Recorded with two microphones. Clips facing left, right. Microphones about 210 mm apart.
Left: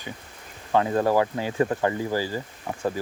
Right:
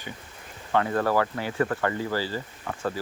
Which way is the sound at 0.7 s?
20° left (ahead or behind).